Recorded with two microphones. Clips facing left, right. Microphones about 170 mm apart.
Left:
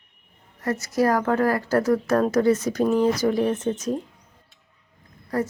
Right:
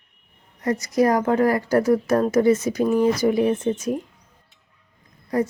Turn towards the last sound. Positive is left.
turn(degrees=-15)  # may be behind; listen again after turning